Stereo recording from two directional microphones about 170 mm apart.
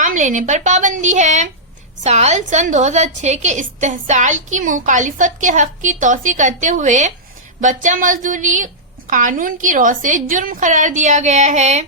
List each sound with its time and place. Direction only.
0.0 s a woman's voice: 45° right (ahead or behind)